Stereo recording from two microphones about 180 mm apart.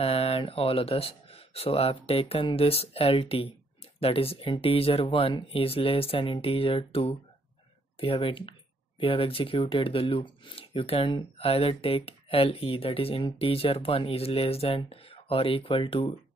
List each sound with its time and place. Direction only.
0.0 s speech: 30° left (ahead or behind)